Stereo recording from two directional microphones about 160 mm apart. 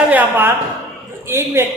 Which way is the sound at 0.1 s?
10° right (ahead or behind).